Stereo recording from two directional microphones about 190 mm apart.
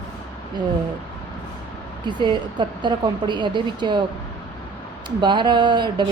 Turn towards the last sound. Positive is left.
turn(degrees=-25)  # may be behind; listen again after turning